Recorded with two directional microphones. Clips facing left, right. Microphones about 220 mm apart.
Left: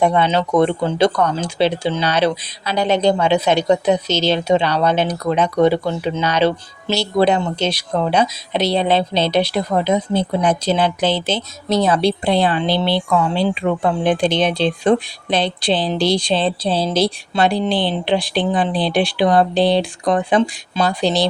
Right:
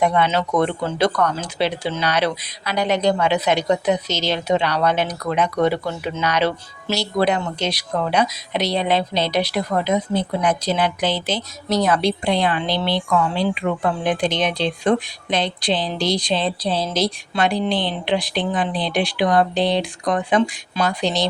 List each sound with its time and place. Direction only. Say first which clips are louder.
0.0 s speech: left 3 dB; 30° left (ahead or behind)